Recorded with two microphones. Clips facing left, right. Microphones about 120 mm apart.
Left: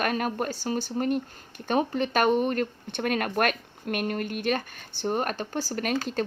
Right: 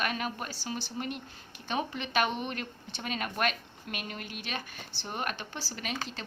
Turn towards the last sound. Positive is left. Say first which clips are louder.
# left 10 dB
turn(degrees=50)  # may be behind; listen again after turning